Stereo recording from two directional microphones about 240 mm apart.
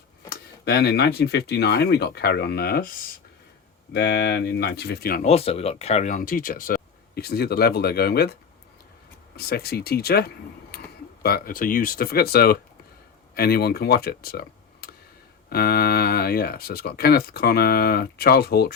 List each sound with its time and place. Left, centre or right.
0.3 s speech: left
3.9 s speech: left
5.2 s speech: left